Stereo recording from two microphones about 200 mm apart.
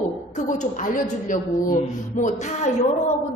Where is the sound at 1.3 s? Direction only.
40° left (ahead or behind).